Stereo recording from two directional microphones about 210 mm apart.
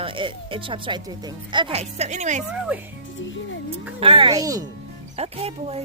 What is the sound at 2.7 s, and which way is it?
Speech, 10° right (ahead or behind).